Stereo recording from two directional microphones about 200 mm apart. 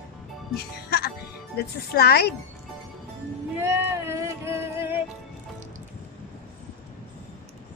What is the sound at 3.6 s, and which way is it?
Music, 10° right (ahead or behind).